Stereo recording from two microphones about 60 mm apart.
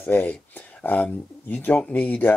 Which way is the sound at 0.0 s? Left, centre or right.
Left.